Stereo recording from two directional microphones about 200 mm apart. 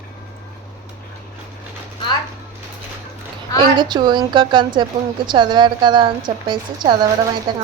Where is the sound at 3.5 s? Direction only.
20° right (ahead or behind).